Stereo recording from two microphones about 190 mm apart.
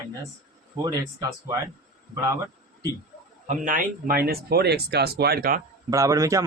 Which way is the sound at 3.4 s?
45° right (ahead or behind).